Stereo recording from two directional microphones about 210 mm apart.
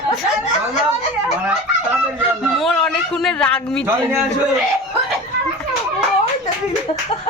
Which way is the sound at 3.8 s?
10° right (ahead or behind).